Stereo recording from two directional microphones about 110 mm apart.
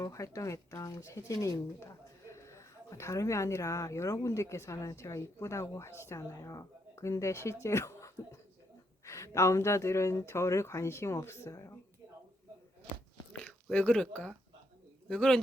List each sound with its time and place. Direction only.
0.0 s a woman's voice: 30° left (ahead or behind)
13.7 s a man's voice: 10° left (ahead or behind)